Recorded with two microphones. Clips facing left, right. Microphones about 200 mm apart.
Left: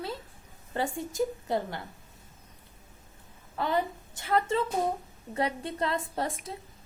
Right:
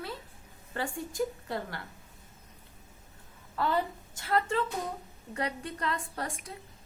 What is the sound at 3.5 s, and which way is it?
A woman's voice, 20° left (ahead or behind).